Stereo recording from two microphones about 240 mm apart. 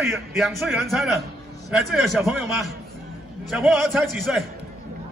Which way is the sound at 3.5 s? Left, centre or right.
Centre.